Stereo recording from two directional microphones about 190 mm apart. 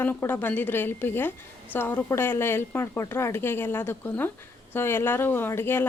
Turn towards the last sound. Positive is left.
turn(degrees=10)  # may be behind; listen again after turning